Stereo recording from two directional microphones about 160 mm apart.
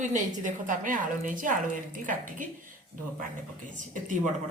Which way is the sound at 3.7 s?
55° right (ahead or behind).